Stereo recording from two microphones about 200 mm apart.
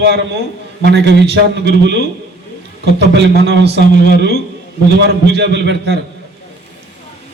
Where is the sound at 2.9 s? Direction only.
55° right (ahead or behind).